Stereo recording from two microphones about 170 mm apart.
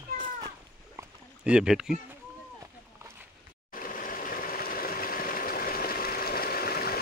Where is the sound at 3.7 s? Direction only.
55° left (ahead or behind).